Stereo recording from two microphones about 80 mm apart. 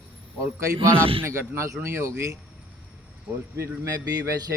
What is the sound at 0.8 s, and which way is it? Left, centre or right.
A man's voice, right.